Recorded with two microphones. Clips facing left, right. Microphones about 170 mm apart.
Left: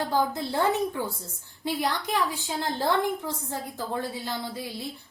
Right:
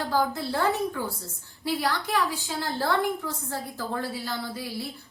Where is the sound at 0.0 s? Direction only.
20° left (ahead or behind).